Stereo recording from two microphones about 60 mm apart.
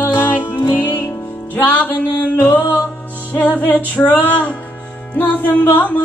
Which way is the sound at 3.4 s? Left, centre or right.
Left.